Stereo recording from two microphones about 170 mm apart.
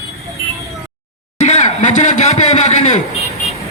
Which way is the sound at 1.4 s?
45° left (ahead or behind).